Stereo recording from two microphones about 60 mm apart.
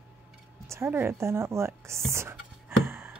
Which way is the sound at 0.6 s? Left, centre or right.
Right.